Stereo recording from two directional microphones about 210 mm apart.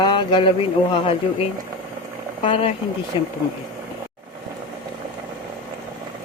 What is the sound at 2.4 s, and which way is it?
Speech, 25° left (ahead or behind).